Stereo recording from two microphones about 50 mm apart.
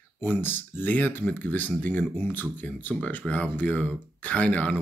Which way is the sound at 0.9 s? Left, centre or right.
Left.